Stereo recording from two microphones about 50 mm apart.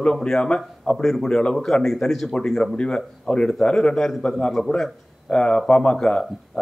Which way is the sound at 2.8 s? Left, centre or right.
Left.